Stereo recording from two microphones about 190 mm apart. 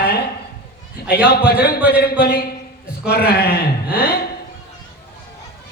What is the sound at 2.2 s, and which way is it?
A man's voice, 55° left (ahead or behind).